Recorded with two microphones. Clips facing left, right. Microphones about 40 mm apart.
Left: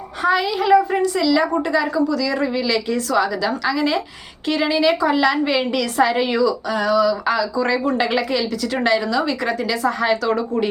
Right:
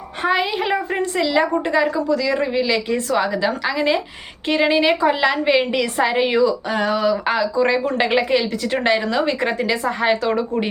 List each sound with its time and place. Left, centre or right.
0.2 s a woman's voice: right